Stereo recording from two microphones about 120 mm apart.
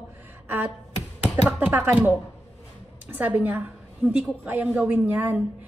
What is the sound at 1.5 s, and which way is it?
Speech, 15° right (ahead or behind).